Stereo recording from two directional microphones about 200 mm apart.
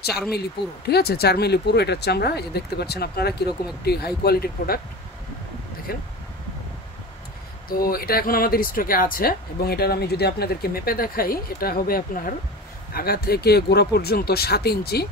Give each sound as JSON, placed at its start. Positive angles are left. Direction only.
{"t": 0.8, "sound": "speech", "side_deg": 50}
{"t": 5.9, "sound": "speech", "side_deg": 50}
{"t": 7.7, "sound": "speech", "side_deg": 50}